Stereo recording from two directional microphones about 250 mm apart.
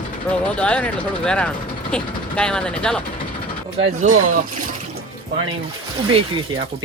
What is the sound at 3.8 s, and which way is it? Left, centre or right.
Speech, right.